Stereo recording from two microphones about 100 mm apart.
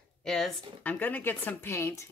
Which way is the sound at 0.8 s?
15° left (ahead or behind).